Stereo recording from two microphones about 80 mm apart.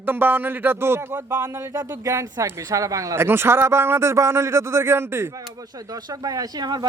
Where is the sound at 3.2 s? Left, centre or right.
Right.